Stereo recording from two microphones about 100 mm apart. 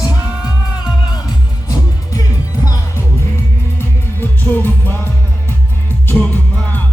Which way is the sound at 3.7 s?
20° left (ahead or behind).